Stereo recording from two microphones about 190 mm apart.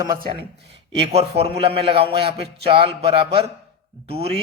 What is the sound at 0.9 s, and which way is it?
A man's voice, 30° right (ahead or behind).